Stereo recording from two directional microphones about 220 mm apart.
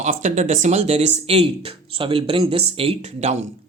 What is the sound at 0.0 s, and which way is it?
Speech, 35° right (ahead or behind).